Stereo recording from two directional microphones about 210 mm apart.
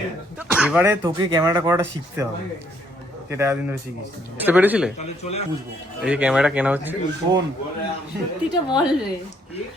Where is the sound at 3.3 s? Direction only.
10° right (ahead or behind).